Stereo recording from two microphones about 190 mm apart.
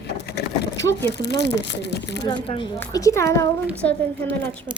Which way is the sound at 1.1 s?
60° left (ahead or behind).